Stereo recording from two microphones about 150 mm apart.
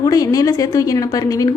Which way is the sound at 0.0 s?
25° left (ahead or behind).